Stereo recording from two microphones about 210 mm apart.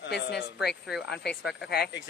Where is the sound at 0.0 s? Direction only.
55° left (ahead or behind).